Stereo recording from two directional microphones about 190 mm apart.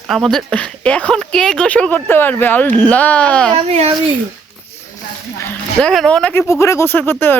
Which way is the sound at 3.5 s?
30° right (ahead or behind).